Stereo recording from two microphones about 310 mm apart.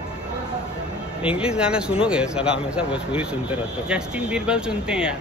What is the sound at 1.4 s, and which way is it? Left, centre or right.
A man's voice, centre.